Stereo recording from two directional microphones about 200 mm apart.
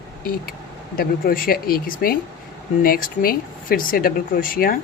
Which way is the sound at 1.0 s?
45° left (ahead or behind).